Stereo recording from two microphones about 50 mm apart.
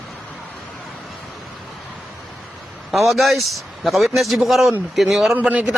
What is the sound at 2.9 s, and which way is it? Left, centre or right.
A man's voice, centre.